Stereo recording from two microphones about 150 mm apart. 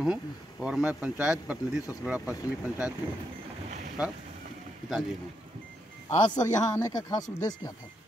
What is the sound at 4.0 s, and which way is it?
Speech, 5° right (ahead or behind).